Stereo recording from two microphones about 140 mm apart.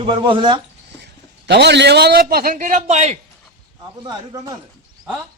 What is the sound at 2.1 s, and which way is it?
A man's voice, 90° right.